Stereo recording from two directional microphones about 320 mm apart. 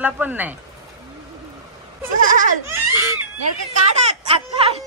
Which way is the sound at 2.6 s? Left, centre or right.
Centre.